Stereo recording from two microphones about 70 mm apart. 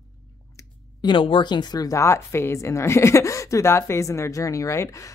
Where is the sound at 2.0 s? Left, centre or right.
Left.